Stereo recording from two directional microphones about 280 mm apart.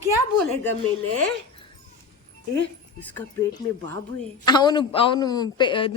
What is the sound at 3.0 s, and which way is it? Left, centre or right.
A man's voice, centre.